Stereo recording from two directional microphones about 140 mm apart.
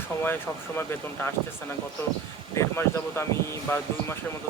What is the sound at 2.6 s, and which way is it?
Speech, 20° left (ahead or behind).